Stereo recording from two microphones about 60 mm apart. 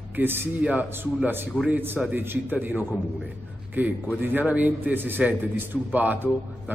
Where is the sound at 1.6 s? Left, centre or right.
Right.